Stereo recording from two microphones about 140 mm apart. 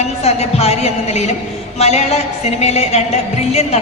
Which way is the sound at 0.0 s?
50° left (ahead or behind).